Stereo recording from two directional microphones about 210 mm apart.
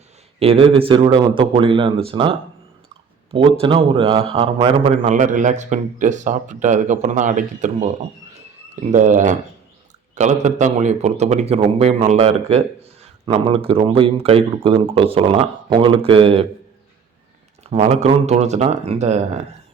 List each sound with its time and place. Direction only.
0.3 s a man's voice: 25° right (ahead or behind)
3.3 s a man's voice: 25° right (ahead or behind)
17.7 s a man's voice: 30° right (ahead or behind)